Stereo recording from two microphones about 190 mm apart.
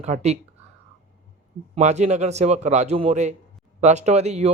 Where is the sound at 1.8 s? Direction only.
40° right (ahead or behind).